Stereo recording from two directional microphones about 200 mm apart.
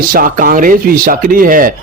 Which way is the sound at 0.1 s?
45° right (ahead or behind).